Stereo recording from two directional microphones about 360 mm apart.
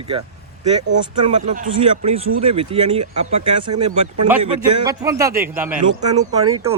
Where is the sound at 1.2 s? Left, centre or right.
Right.